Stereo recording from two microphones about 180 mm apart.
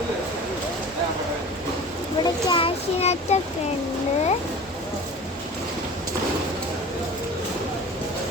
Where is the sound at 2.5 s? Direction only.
30° left (ahead or behind).